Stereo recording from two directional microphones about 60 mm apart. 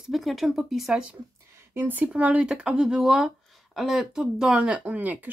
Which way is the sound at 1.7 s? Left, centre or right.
Right.